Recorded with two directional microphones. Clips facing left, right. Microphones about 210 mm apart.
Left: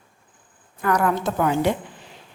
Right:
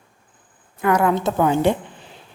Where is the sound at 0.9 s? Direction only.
25° right (ahead or behind).